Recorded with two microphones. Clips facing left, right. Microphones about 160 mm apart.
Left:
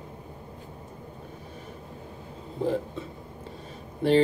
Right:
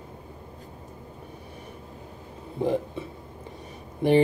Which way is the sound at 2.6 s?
15° right (ahead or behind).